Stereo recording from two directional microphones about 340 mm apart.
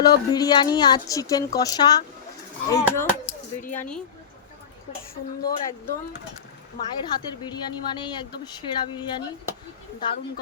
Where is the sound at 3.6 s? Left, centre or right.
Left.